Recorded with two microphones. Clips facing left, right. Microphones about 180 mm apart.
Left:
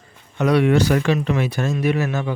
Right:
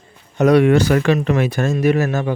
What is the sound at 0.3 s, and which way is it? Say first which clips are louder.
Speech: right 4 dB; 45° right (ahead or behind).